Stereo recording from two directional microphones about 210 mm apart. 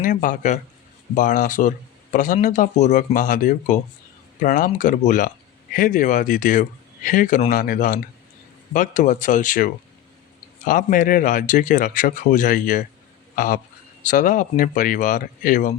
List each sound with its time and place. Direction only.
0.0 s speech: 40° left (ahead or behind)